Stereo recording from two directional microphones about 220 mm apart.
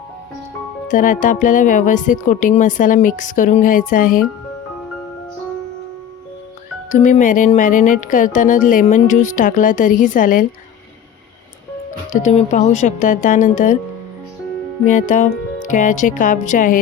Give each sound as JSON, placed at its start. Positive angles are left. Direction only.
{"t": 0.9, "sound": "speech", "side_deg": 35}
{"t": 6.9, "sound": "speech", "side_deg": 35}
{"t": 12.1, "sound": "speech", "side_deg": 30}
{"t": 14.8, "sound": "speech", "side_deg": 35}